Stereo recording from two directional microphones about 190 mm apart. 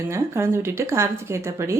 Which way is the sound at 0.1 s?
15° right (ahead or behind).